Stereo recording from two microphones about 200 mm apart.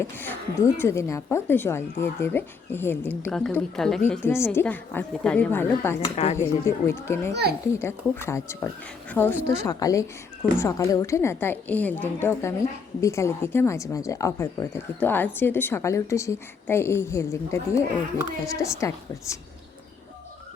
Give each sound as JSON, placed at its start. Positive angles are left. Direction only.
{"t": 0.0, "sound": "a woman's voice", "side_deg": 10}
{"t": 6.1, "sound": "speech", "side_deg": 30}
{"t": 6.4, "sound": "a woman's voice", "side_deg": 10}